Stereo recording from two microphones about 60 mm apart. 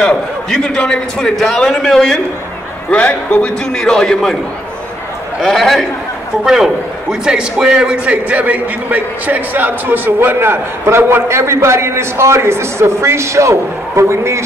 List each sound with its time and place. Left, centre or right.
0.1 s a man's voice: centre
1.3 s a man's voice: centre
2.9 s a man's voice: left; by 4.4 s centre
5.4 s a man's voice: centre; by 14.4 s right